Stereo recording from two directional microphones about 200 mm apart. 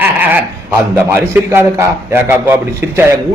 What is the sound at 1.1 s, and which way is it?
A man's voice, 10° right (ahead or behind).